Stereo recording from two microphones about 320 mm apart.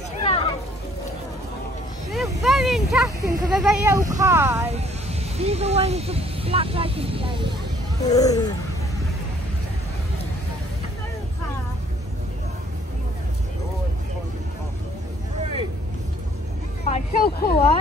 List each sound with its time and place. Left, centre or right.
0.3 s a sound: centre
2.0 s a sound: centre
3.3 s speech: centre
5.4 s speech: centre
8.0 s speech: centre
16.8 s speech: left